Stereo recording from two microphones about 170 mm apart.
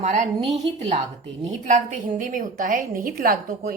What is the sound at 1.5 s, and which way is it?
A woman's voice, 45° right (ahead or behind).